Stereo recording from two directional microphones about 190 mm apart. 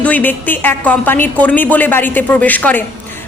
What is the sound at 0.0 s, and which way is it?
Speech, 10° left (ahead or behind).